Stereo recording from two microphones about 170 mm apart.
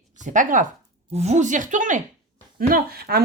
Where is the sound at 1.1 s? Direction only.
40° right (ahead or behind).